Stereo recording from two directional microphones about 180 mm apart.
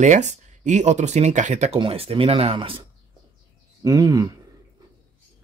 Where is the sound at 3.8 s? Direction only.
20° right (ahead or behind).